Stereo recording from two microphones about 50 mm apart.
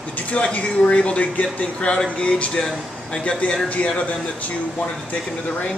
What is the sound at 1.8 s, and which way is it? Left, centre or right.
Speech, centre.